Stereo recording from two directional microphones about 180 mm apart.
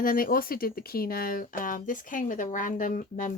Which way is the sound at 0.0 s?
50° left (ahead or behind).